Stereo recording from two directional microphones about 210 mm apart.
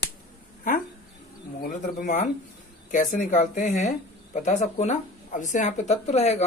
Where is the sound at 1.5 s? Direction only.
35° left (ahead or behind).